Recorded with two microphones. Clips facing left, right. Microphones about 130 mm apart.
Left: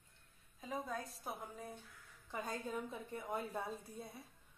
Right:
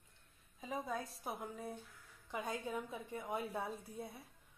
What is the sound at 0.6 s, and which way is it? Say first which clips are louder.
A woman's voice: right 1 dB; centre (ahead or behind).